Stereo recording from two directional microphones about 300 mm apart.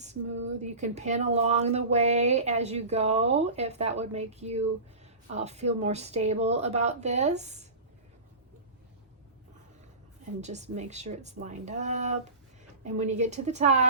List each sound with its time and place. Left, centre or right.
0.6 s speech: right
10.4 s speech: right